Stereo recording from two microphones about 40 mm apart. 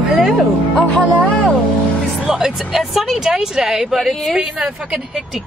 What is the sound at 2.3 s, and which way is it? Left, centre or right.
Vehicle, centre.